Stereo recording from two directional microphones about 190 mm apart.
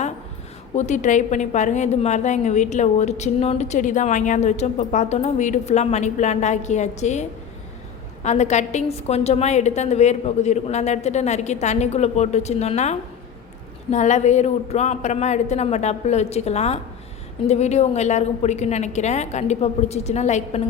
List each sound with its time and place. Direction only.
0.8 s a woman's voice: 40° left (ahead or behind)